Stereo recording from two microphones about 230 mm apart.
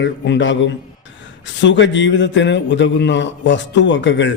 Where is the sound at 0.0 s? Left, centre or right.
Left.